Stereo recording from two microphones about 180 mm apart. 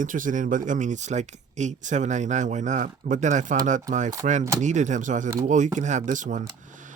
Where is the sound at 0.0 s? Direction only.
45° right (ahead or behind).